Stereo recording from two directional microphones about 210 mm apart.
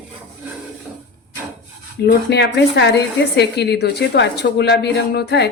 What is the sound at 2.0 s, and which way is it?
Speech, 50° left (ahead or behind).